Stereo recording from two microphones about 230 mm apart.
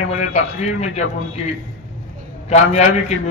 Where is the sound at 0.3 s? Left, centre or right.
Left.